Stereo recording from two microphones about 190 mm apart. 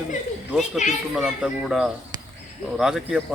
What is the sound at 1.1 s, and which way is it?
Speech, centre (ahead or behind).